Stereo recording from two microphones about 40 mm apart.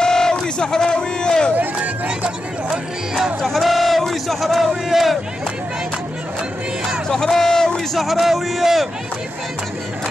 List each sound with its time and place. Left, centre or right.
0.0 s speech: centre
1.6 s speech: right
3.4 s speech: centre
7.1 s a sound: centre
8.0 s speech: centre